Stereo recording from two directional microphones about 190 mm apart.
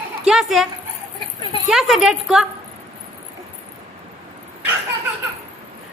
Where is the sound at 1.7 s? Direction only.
Centre (ahead or behind).